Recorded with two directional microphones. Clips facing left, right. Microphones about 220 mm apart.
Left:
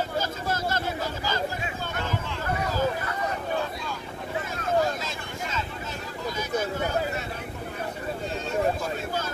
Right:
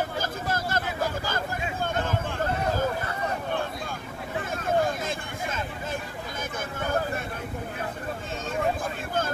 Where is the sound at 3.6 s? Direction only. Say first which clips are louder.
Left 1 dB; 50° right (ahead or behind).